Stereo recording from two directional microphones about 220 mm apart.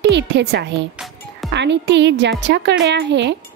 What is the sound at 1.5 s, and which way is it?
Speech, 55° right (ahead or behind).